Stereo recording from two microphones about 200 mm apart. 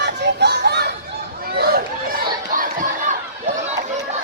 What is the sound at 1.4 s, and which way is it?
Chatter, 50° right (ahead or behind).